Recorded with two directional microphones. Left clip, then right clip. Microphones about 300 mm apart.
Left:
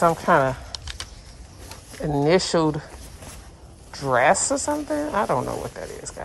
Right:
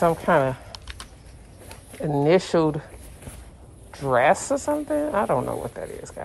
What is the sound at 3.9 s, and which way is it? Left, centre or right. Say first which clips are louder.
A woman's voice: left 1 dB; centre.